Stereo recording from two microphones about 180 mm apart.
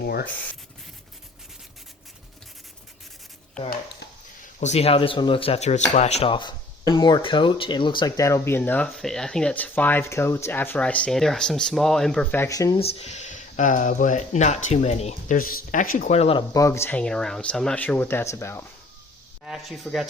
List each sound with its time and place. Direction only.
0.0 s rub: 60° left (ahead or behind)
4.6 s speech: 35° left (ahead or behind); by 12.8 s 20° left (ahead or behind)
12.8 s speech: 35° left (ahead or behind)
15.4 s speech: 50° left (ahead or behind)
16.1 s speech: 35° left (ahead or behind)
16.6 s speech: 15° left (ahead or behind)
19.5 s speech: centre (ahead or behind)